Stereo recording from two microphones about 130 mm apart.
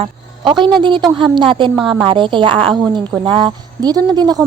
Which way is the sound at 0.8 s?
35° right (ahead or behind).